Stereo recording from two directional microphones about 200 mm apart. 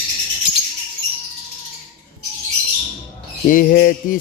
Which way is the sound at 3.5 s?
45° left (ahead or behind).